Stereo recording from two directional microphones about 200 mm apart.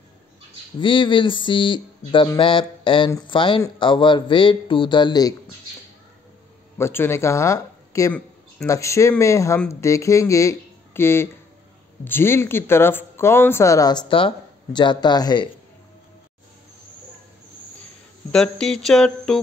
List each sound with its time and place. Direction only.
0.7 s speech: 25° left (ahead or behind)
6.8 s speech: 10° left (ahead or behind)
18.3 s a sound: 5° left (ahead or behind)